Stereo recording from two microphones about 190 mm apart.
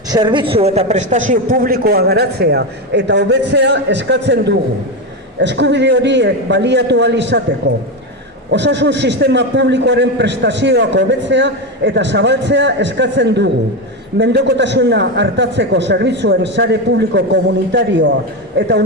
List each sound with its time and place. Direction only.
0.1 s a man's voice: 25° right (ahead or behind); by 18.9 s 65° right (ahead or behind)